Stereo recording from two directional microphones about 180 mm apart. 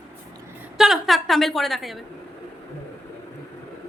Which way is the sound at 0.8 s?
Centre (ahead or behind).